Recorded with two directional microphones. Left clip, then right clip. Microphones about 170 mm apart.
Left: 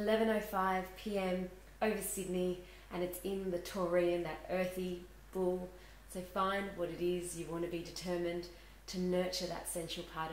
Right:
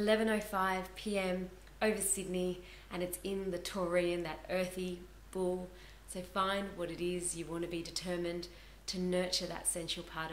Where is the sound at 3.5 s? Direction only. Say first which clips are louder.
Even; 10° right (ahead or behind).